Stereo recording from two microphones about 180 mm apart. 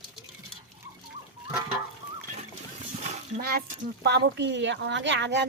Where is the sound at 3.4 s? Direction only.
60° right (ahead or behind).